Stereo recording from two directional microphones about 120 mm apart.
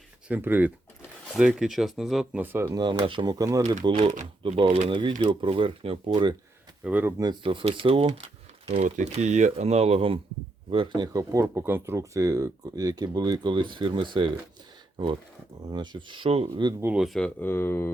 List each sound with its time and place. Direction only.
0.3 s speech: 15° right (ahead or behind)
2.4 s speech: 15° right (ahead or behind)
2.6 s speech: 35° right (ahead or behind)
3.3 s speech: 30° right (ahead or behind)
3.8 s speech: 45° right (ahead or behind)
6.8 s speech: 15° right (ahead or behind)
7.4 s speech: 45° right (ahead or behind)
9.0 s speech: 70° right (ahead or behind); by 14.3 s 45° right (ahead or behind)
15.6 s speech: 40° right (ahead or behind)
16.8 s speech: 5° right (ahead or behind)
17.4 s speech: 20° left (ahead or behind)